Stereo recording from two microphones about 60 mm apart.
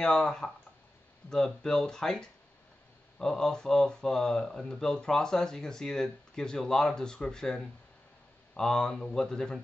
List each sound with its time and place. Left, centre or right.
0.0 s speech: centre